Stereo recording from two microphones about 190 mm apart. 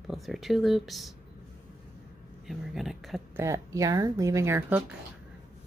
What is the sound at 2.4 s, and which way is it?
Speech, centre (ahead or behind).